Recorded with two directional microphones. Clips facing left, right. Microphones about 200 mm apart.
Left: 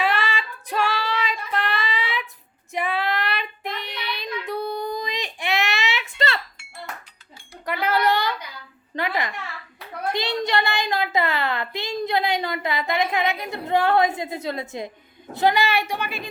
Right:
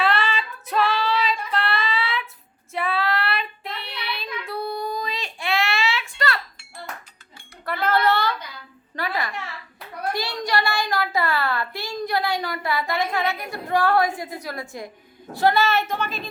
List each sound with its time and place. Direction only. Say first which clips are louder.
0.0 s female singing: right 1 dB; 15° left (ahead or behind)
2.7 s child singing: even; 15° left (ahead or behind)
7.6 s a sound: right 1 dB; 15° left (ahead or behind)
15.3 s a woman's voice: right 1 dB; 20° left (ahead or behind)